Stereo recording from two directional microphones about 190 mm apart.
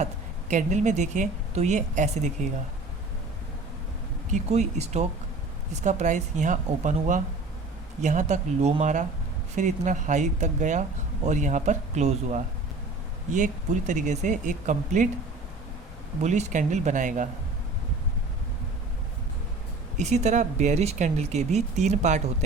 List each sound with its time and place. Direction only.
0.5 s speech: 40° right (ahead or behind)
4.3 s speech: 35° right (ahead or behind)
16.2 s speech: 40° right (ahead or behind)
20.0 s speech: 40° right (ahead or behind)